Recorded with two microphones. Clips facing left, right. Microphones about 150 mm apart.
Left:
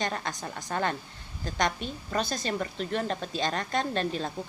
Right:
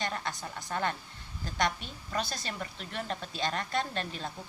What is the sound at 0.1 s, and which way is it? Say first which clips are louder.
Speech: left 3 dB; 40° left (ahead or behind).